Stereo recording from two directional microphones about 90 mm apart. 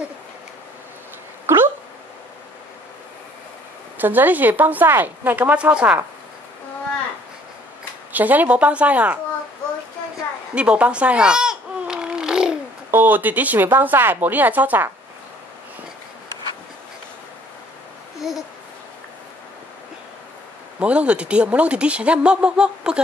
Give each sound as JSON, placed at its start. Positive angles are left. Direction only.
{"t": 1.4, "sound": "dog", "side_deg": -25}
{"t": 4.0, "sound": "speech", "side_deg": -20}
{"t": 8.1, "sound": "speech", "side_deg": -20}
{"t": 10.5, "sound": "baby cry", "side_deg": -15}
{"t": 12.9, "sound": "speech", "side_deg": -20}
{"t": 18.2, "sound": "speech", "side_deg": -5}
{"t": 20.8, "sound": "speech", "side_deg": -15}